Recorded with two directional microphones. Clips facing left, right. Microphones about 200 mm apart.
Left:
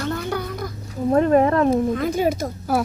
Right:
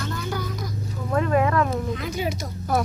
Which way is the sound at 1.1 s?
35° left (ahead or behind).